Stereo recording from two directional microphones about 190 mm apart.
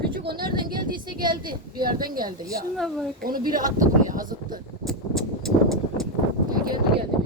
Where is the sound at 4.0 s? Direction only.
45° right (ahead or behind).